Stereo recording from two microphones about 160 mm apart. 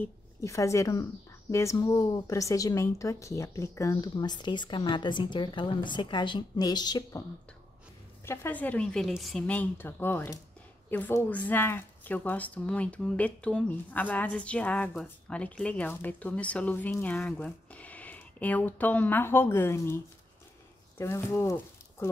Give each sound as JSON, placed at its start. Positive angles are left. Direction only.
{"t": 0.0, "sound": "a woman's voice", "side_deg": 20}
{"t": 8.3, "sound": "a woman's voice", "side_deg": 10}
{"t": 21.0, "sound": "speech", "side_deg": 15}